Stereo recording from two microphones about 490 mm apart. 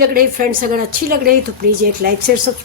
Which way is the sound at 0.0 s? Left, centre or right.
Centre.